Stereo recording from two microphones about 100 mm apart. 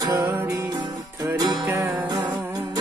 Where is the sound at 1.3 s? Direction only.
40° right (ahead or behind).